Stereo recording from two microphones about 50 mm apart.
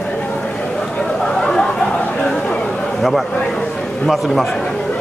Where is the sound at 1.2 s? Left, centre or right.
Centre.